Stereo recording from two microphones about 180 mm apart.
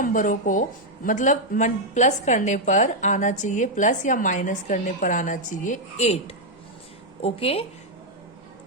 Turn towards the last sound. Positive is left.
turn(degrees=35)  # may be behind; listen again after turning